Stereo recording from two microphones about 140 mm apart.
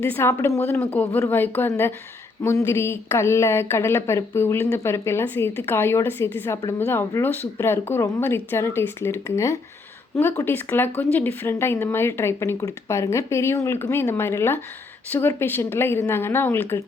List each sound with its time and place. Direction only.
0.0 s speech: 15° left (ahead or behind)